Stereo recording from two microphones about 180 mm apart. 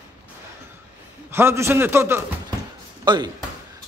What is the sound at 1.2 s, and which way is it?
A man's voice, 15° right (ahead or behind).